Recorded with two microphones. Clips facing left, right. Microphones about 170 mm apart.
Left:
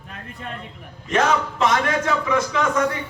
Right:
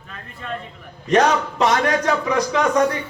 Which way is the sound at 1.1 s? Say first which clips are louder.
Right 3 dB; 40° right (ahead or behind).